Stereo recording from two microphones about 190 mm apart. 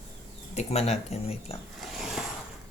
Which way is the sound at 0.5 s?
35° left (ahead or behind).